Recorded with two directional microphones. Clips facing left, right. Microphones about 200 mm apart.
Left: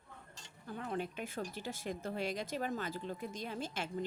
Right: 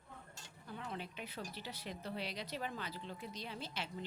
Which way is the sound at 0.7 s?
50° left (ahead or behind).